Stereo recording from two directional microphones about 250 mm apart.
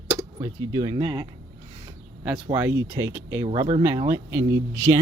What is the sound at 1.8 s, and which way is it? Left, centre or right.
Speech, centre.